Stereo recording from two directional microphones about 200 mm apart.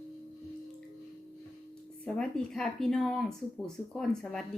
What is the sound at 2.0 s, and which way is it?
Speech, 5° left (ahead or behind).